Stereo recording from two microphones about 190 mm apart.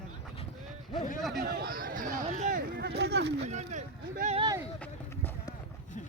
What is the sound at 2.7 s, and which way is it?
Speech, 60° right (ahead or behind).